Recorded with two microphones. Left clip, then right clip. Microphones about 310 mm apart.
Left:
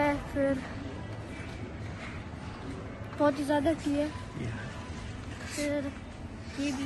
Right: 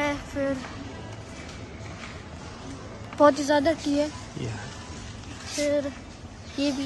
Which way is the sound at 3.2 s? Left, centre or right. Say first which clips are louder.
Right 8 dB; right.